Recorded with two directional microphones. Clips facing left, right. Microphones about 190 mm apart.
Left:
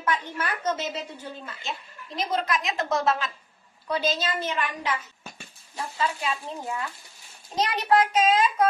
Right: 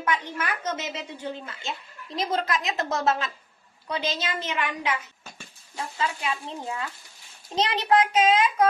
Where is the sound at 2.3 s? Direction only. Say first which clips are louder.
Left 1 dB; 30° right (ahead or behind).